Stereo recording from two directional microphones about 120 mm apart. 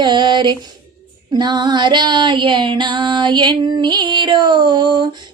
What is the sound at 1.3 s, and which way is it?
Female singing, 35° right (ahead or behind).